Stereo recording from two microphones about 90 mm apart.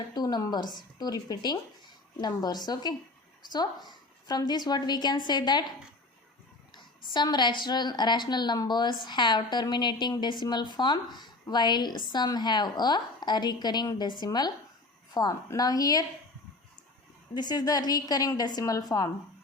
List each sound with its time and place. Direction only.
0.1 s a woman's voice: 50° left (ahead or behind)
6.7 s a woman's voice: 55° left (ahead or behind)
17.3 s a woman's voice: 50° left (ahead or behind)